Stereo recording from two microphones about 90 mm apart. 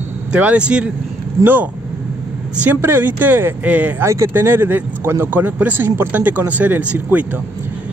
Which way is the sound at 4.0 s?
30° right (ahead or behind).